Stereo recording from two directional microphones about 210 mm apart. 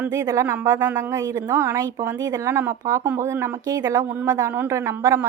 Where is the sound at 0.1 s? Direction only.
15° right (ahead or behind).